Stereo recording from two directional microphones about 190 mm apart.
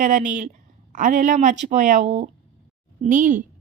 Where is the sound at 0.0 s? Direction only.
45° right (ahead or behind).